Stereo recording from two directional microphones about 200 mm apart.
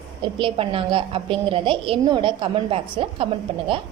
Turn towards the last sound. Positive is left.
turn(degrees=-25)  # may be behind; listen again after turning